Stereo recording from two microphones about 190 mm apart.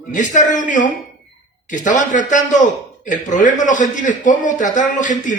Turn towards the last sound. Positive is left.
turn(degrees=40)  # may be behind; listen again after turning